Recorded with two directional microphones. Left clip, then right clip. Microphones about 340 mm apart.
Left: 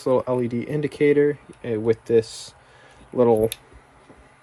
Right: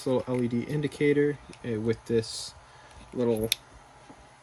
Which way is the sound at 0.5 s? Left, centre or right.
Left.